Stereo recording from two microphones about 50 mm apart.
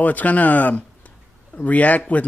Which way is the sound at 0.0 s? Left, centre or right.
Left.